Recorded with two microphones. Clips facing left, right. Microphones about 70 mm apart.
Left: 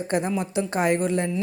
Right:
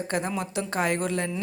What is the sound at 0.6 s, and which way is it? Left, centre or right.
Speech, centre.